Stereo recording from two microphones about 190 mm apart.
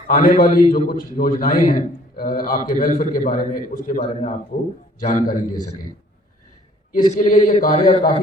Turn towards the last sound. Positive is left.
turn(degrees=45)  # may be behind; listen again after turning